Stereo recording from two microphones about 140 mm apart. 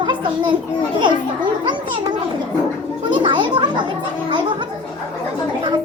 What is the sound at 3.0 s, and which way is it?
Children playing, 35° right (ahead or behind).